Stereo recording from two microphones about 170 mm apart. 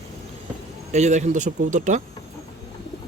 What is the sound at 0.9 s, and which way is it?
Speech, 45° right (ahead or behind).